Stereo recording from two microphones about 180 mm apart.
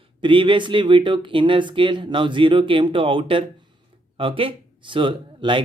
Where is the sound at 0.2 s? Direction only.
25° right (ahead or behind).